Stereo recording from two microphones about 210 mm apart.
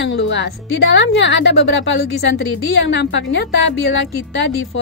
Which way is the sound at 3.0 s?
60° left (ahead or behind).